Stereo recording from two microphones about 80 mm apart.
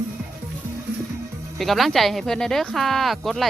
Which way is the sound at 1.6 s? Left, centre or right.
Centre.